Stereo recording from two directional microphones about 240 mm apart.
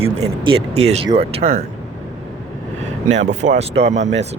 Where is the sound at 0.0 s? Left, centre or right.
Right.